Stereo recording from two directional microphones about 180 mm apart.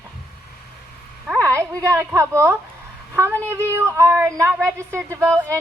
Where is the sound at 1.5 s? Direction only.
15° right (ahead or behind).